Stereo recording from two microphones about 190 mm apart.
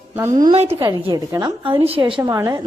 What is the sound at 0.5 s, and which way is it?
Speech, 30° right (ahead or behind).